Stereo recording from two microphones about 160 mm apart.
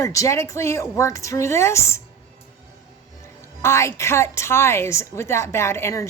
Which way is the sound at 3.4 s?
15° left (ahead or behind).